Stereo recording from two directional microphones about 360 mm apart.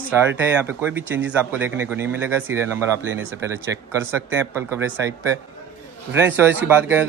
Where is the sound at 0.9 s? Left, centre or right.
Centre.